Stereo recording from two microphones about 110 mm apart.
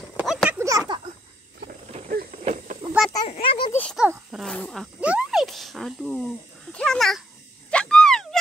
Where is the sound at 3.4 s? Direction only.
55° left (ahead or behind).